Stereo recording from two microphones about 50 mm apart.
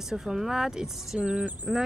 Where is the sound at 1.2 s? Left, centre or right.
Right.